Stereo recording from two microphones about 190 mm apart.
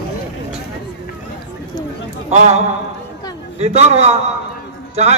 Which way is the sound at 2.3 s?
35° right (ahead or behind).